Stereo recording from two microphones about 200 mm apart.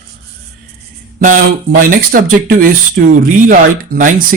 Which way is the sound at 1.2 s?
40° right (ahead or behind).